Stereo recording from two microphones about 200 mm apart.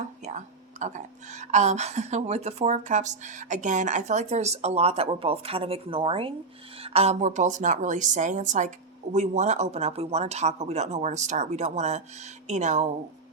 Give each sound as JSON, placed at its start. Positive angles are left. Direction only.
{"t": 0.3, "sound": "speech", "side_deg": -35}